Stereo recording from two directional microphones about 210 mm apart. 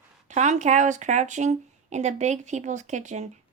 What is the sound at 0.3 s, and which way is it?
Speech, 35° right (ahead or behind).